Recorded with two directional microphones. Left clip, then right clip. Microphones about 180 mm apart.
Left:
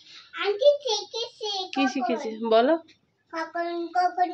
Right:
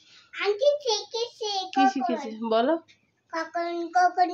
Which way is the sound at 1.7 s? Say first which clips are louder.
Right 4 dB; 5° right (ahead or behind).